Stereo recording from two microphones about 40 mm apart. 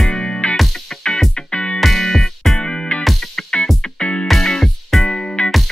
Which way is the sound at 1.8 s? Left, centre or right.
Centre.